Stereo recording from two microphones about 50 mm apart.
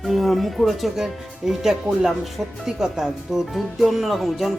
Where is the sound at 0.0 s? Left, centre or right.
Centre.